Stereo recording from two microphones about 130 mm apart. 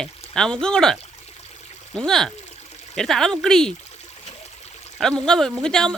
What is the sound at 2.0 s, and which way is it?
Speech, 5° left (ahead or behind).